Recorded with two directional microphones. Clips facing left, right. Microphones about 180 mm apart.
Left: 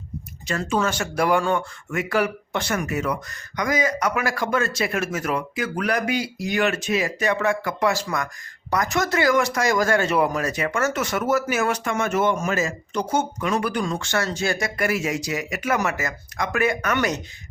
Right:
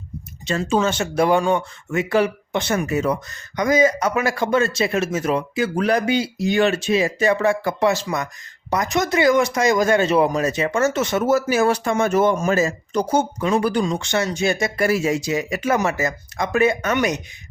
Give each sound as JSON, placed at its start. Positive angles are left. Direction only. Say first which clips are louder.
{"t": 0.4, "sound": "speech", "louder": "right 4 dB", "side_deg": -25}
{"t": 13.8, "sound": "speech", "louder": "right 3 dB", "side_deg": -20}